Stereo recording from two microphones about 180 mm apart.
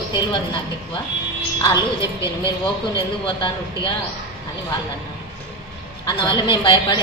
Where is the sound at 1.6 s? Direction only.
25° left (ahead or behind).